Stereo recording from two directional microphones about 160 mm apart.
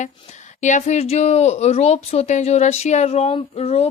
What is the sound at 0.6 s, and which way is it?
Speech, 50° left (ahead or behind).